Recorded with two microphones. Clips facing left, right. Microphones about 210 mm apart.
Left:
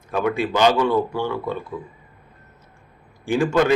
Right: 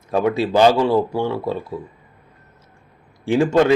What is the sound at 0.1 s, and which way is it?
Speech, 30° right (ahead or behind).